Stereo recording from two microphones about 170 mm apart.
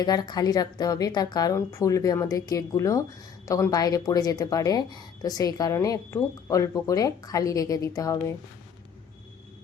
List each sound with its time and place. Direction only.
0.0 s a woman's voice: 25° left (ahead or behind)